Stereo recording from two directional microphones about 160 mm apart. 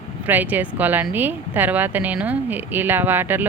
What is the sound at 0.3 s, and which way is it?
Speech, 10° right (ahead or behind).